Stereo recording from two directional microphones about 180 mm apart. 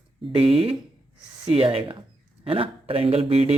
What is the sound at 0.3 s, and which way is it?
Speech, 30° right (ahead or behind).